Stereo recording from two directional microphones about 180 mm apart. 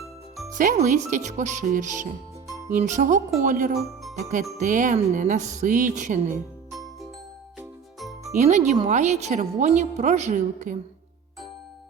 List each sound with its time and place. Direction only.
0.5 s speech: 45° right (ahead or behind)
7.6 s music: centre (ahead or behind)
8.4 s a woman's voice: 40° right (ahead or behind)